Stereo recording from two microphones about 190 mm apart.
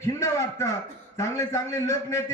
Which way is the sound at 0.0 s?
15° left (ahead or behind).